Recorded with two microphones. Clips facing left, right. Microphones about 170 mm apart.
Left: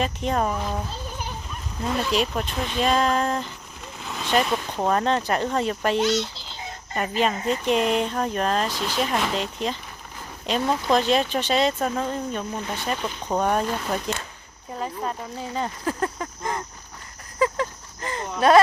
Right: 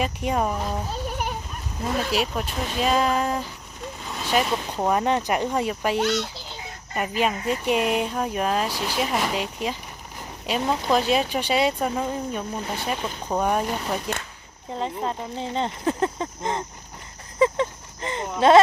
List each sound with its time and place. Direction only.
0.0 s speech: 10° right (ahead or behind)
1.8 s speech: 5° right (ahead or behind)
6.0 s a sound: 55° right (ahead or behind)
6.9 s speech: 10° right (ahead or behind)
14.8 s speech: 25° right (ahead or behind)
17.4 s a sound: 25° right (ahead or behind)